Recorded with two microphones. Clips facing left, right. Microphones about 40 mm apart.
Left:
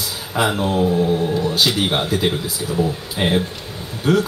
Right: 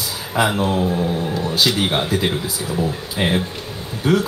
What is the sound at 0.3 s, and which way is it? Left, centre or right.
Speech, centre.